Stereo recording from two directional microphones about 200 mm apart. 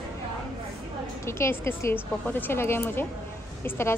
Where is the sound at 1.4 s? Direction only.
10° left (ahead or behind).